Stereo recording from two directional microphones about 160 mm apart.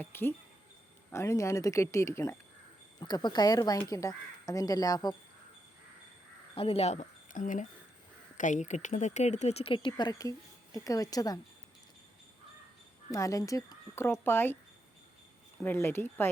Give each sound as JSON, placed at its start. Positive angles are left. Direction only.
{"t": 0.0, "sound": "a woman's voice", "side_deg": 15}
{"t": 6.6, "sound": "speech", "side_deg": 40}
{"t": 13.1, "sound": "a woman's voice", "side_deg": 20}
{"t": 15.6, "sound": "speech", "side_deg": 15}